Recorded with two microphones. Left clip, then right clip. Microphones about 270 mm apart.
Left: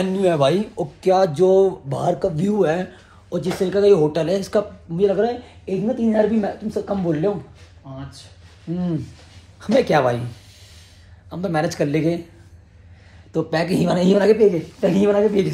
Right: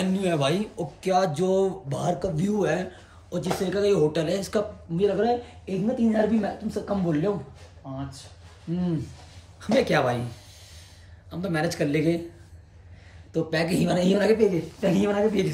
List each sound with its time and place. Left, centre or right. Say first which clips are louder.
0.0 s speech: left 8 dB; centre
7.8 s speech: even; right
9.6 s speech: left 6 dB; centre
11.2 s a woman's voice: left 5 dB; centre
13.3 s a woman's voice: left 5 dB; centre